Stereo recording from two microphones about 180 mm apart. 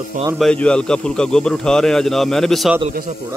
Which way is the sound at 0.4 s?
5° left (ahead or behind).